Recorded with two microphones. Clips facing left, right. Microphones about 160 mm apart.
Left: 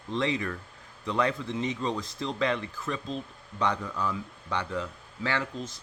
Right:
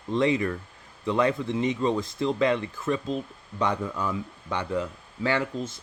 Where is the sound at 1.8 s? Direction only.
50° right (ahead or behind).